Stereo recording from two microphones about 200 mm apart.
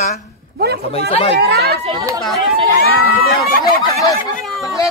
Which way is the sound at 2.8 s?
50° left (ahead or behind).